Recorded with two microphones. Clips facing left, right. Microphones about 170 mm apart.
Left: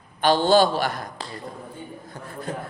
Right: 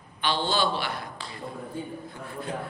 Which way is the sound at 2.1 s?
40° left (ahead or behind).